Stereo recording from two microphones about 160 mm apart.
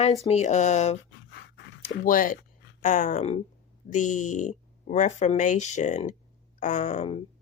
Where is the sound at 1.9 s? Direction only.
60° left (ahead or behind).